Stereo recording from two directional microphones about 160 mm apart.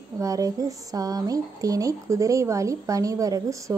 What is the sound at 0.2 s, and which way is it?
A woman's voice, 20° right (ahead or behind).